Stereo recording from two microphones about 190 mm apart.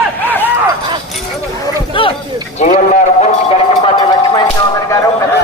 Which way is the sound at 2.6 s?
40° left (ahead or behind).